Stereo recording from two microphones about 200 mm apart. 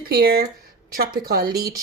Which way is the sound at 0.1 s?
50° right (ahead or behind).